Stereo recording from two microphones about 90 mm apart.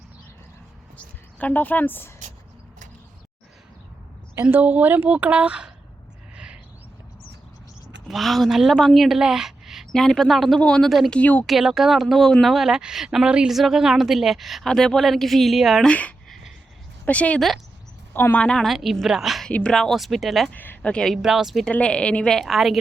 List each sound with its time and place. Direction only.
0.9 s speech: 15° left (ahead or behind)
4.5 s a woman's voice: 20° right (ahead or behind)
6.3 s a sound: 10° right (ahead or behind)
8.0 s a woman's voice: centre (ahead or behind); by 11.4 s 15° left (ahead or behind)
11.4 s a woman's voice: 5° right (ahead or behind)
15.9 s a woman's voice: 15° left (ahead or behind)
18.4 s a woman's voice: 5° left (ahead or behind)
19.5 s a woman's voice: 10° left (ahead or behind)
20.5 s a sound: 20° left (ahead or behind)
20.9 s a woman's voice: 5° left (ahead or behind)
21.7 s a woman's voice: 15° left (ahead or behind)